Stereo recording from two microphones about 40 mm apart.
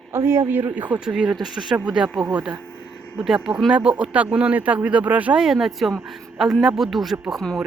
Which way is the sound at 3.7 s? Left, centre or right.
Right.